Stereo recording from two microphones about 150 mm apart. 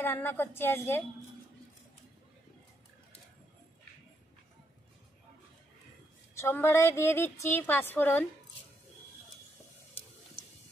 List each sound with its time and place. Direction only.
0.0 s a woman's voice: 15° left (ahead or behind)
6.3 s a woman's voice: 15° left (ahead or behind)